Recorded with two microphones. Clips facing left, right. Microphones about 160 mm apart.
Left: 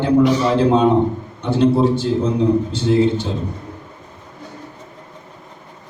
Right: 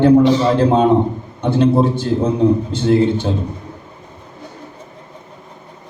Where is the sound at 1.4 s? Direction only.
55° right (ahead or behind).